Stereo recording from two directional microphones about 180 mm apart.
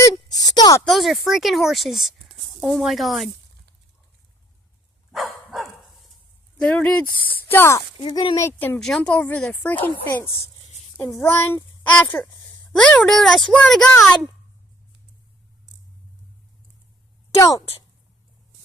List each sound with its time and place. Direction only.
0.0 s a sound: 20° left (ahead or behind)
0.8 s speech: centre (ahead or behind)
5.1 s dog: centre (ahead or behind)
6.6 s speech: 5° left (ahead or behind)
8.0 s speech: 25° left (ahead or behind)
8.4 s a child's voice: 10° left (ahead or behind)
17.3 s speech: 20° left (ahead or behind)